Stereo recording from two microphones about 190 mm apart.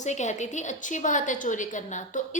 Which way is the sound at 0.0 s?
40° left (ahead or behind).